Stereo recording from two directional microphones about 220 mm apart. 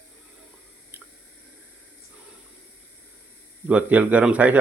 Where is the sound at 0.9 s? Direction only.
10° right (ahead or behind).